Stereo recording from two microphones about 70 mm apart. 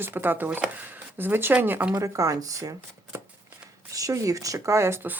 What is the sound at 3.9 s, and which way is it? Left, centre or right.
Speech, right.